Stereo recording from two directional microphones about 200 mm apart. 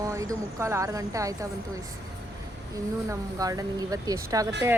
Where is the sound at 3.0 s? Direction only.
15° right (ahead or behind).